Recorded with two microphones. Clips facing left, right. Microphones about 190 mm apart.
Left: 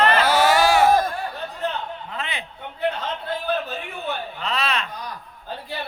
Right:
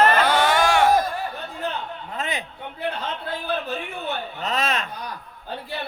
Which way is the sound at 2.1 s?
45° right (ahead or behind).